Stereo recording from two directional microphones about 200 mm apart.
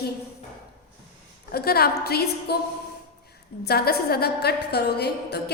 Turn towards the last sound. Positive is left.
turn(degrees=55)  # may be behind; listen again after turning